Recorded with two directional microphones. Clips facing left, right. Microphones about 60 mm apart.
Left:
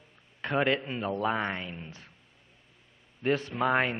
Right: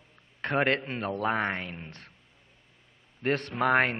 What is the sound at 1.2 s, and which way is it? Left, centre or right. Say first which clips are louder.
Speech: right 3 dB; right.